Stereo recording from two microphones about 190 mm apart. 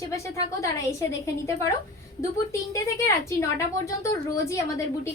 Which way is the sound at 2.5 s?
15° left (ahead or behind).